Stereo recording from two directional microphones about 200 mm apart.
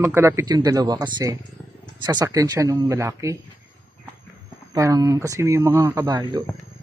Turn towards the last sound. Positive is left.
turn(degrees=-20)  # may be behind; listen again after turning